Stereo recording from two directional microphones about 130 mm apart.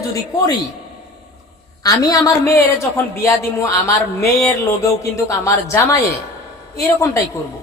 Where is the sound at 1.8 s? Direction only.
30° left (ahead or behind).